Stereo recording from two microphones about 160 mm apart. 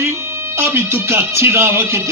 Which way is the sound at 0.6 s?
15° right (ahead or behind).